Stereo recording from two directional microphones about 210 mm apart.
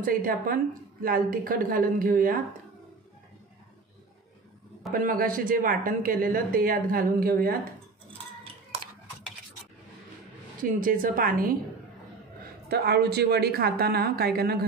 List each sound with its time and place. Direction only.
0.0 s speech: 40° right (ahead or behind)
4.9 s speech: 40° right (ahead or behind)
10.6 s speech: 40° right (ahead or behind)
12.6 s speech: 50° right (ahead or behind)